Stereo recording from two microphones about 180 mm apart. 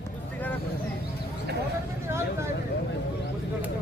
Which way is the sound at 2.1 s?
15° right (ahead or behind).